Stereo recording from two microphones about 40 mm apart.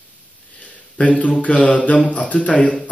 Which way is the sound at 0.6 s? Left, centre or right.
Left.